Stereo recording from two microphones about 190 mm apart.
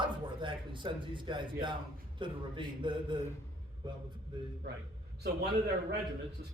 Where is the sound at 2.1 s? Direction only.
25° right (ahead or behind).